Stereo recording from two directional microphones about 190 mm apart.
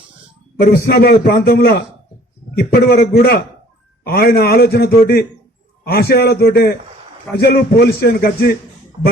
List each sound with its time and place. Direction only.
0.6 s music: 50° left (ahead or behind)
2.6 s a man's voice: 55° left (ahead or behind)
7.3 s music: 55° left (ahead or behind)